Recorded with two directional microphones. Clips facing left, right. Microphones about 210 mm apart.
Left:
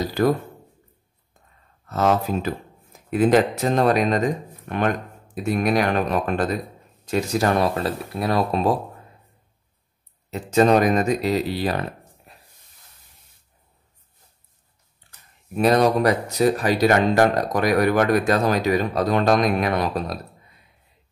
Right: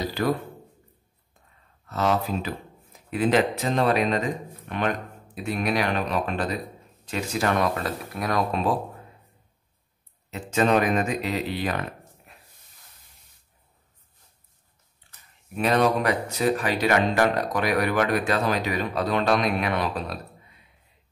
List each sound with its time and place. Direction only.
0.2 s speech: 45° left (ahead or behind)
1.9 s speech: 45° left (ahead or behind)
10.3 s speech: 40° left (ahead or behind)
12.3 s a sound: 35° left (ahead or behind)
15.5 s speech: 40° left (ahead or behind)